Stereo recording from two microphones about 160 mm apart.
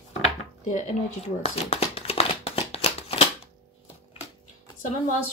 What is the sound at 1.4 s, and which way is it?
Shuffling cards, 40° left (ahead or behind).